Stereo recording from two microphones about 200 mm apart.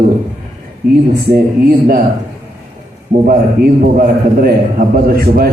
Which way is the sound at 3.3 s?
45° right (ahead or behind).